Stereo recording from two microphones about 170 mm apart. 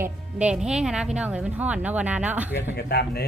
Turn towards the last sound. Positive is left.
turn(degrees=65)  # may be behind; listen again after turning